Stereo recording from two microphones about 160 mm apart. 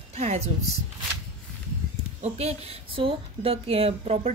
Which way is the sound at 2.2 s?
40° right (ahead or behind).